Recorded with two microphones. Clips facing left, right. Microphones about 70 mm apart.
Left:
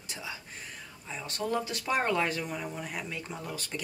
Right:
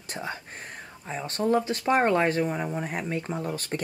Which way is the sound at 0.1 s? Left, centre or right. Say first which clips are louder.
Right 7 dB; right.